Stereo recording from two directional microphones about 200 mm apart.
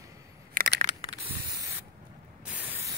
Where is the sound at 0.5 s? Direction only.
50° right (ahead or behind).